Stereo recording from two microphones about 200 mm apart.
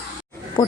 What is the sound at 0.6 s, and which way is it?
Speech, 15° left (ahead or behind).